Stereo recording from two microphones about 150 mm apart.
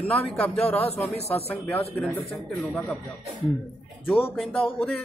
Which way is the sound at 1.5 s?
10° left (ahead or behind).